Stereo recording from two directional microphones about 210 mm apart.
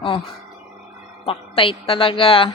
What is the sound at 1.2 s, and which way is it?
A woman's voice, 25° left (ahead or behind).